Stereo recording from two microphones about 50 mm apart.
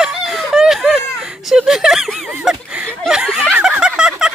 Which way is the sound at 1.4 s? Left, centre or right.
Centre.